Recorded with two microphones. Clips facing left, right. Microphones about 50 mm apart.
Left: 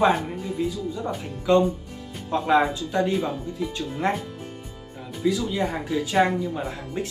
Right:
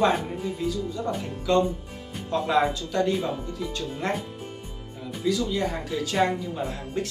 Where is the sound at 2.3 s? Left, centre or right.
Centre.